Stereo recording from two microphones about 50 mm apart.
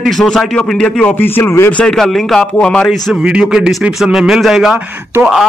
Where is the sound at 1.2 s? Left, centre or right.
Left.